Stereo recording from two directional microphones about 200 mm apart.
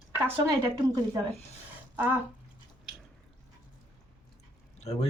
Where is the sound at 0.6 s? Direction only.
15° right (ahead or behind).